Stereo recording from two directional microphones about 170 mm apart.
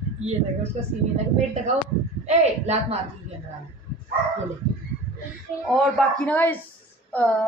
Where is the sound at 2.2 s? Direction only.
40° right (ahead or behind).